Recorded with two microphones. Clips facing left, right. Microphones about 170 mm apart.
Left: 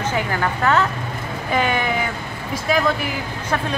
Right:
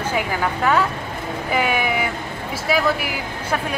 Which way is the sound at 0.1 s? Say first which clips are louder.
Even; 10° right (ahead or behind).